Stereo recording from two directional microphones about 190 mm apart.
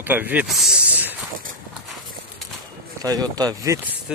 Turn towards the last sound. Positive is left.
turn(degrees=-20)  # may be behind; listen again after turning